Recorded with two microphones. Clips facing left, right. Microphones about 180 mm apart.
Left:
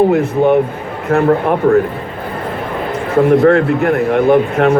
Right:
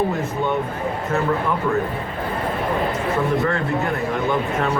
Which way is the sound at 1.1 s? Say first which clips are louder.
Left 11 dB; 60° left (ahead or behind).